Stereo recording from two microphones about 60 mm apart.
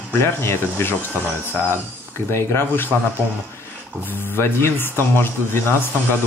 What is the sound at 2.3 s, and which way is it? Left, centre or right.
Speech, left.